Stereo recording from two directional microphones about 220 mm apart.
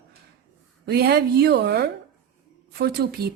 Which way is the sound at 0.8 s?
45° right (ahead or behind).